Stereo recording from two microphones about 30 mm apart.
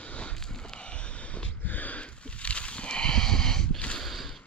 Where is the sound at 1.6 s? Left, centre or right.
Left.